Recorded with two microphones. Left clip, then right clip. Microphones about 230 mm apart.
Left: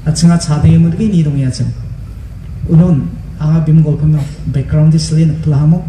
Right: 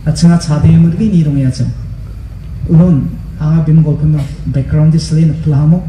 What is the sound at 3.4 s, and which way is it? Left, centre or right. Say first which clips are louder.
A man's voice: even; left.